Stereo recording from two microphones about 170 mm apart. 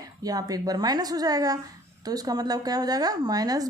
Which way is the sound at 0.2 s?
20° right (ahead or behind).